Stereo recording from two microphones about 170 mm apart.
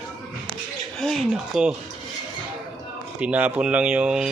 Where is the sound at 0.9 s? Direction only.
Centre (ahead or behind).